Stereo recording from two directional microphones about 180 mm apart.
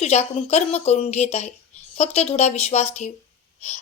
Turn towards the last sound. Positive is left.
turn(degrees=40)  # may be behind; listen again after turning